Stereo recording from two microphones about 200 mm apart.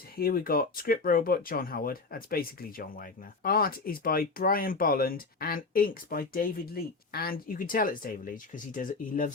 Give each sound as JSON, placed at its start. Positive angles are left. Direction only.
{"t": 0.2, "sound": "speech", "side_deg": 45}